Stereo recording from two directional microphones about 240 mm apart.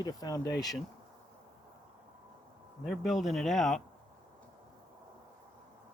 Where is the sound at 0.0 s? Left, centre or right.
Centre.